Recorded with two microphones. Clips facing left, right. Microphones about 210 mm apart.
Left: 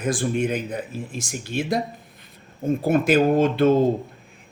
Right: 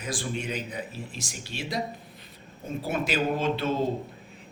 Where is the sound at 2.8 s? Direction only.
50° left (ahead or behind).